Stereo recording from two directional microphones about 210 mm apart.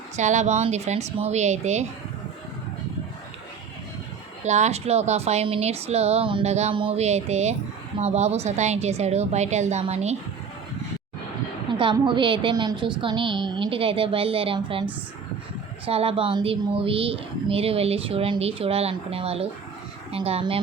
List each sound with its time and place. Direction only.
0.2 s a woman's voice: 35° right (ahead or behind)
4.4 s a woman's voice: 35° right (ahead or behind)
11.7 s speech: 25° right (ahead or behind)
15.9 s speech: 25° right (ahead or behind)